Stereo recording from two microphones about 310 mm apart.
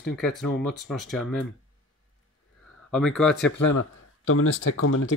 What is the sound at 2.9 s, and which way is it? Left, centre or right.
Speech, centre.